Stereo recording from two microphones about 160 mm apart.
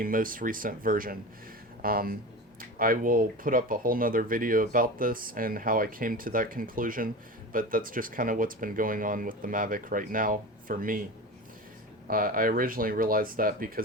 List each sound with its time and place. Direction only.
0.0 s speech: 60° right (ahead or behind)
12.0 s speech: 65° right (ahead or behind)